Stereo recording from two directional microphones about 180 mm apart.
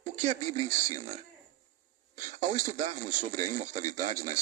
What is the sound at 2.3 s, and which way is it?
Speech, 45° right (ahead or behind).